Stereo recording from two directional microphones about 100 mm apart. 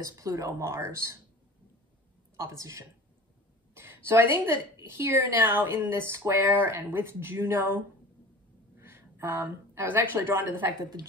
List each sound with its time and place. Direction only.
0.0 s speech: 35° right (ahead or behind)
2.3 s a woman's voice: 30° right (ahead or behind)
10.8 s speech: 40° right (ahead or behind)